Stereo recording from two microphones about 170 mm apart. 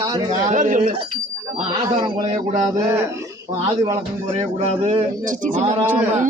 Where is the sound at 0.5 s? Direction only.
50° right (ahead or behind).